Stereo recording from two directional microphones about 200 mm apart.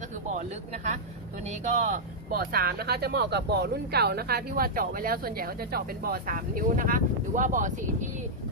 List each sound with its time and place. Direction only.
1.8 s speech: 45° right (ahead or behind)